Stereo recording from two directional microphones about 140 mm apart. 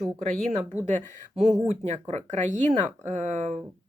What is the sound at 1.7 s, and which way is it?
Speech, 50° right (ahead or behind).